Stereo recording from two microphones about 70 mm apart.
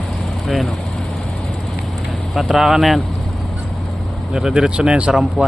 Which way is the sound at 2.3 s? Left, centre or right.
Centre.